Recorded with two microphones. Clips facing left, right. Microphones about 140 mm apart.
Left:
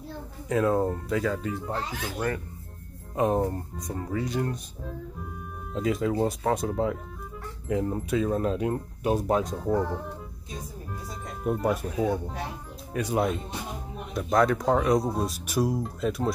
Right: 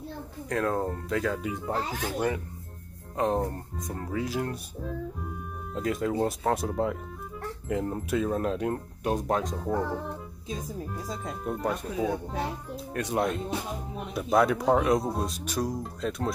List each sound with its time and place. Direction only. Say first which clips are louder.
0.5 s speech: left 4 dB; 5° left (ahead or behind)
1.4 s speech: even; 10° right (ahead or behind)
1.9 s speech: right 2 dB; 45° right (ahead or behind)
3.2 s speech: left 2 dB; 10° left (ahead or behind)
11.4 s speech: left 5 dB; 5° left (ahead or behind)